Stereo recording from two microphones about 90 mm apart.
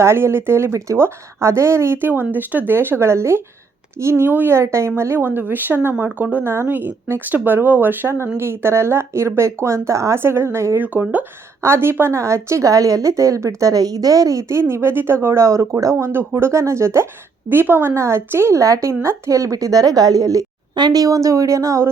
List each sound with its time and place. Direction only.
0.0 s speech: 30° right (ahead or behind)
10.8 s a woman's voice: 20° right (ahead or behind); by 21.8 s 35° right (ahead or behind)